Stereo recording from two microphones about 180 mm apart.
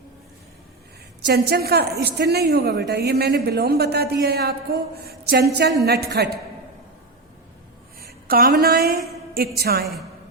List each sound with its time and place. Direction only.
1.3 s a woman's voice: 60° right (ahead or behind)
7.9 s a woman's voice: 55° right (ahead or behind)